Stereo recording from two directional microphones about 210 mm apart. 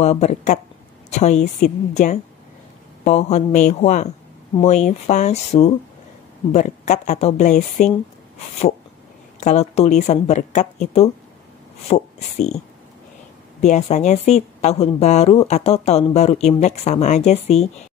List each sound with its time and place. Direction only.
0.0 s speech: 30° left (ahead or behind)
9.4 s speech: 35° left (ahead or behind)